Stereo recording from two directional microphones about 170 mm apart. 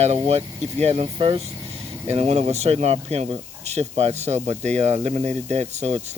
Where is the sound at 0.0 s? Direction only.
40° right (ahead or behind).